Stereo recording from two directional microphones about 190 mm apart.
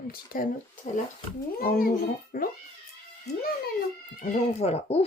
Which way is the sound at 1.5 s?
50° left (ahead or behind).